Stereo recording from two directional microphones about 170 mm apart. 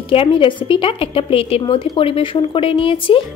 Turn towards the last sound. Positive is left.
turn(degrees=30)  # may be behind; listen again after turning